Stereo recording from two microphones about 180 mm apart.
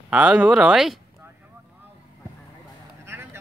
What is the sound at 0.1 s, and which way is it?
Speech, 5° right (ahead or behind).